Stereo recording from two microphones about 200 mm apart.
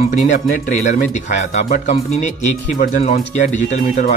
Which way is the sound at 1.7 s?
35° left (ahead or behind).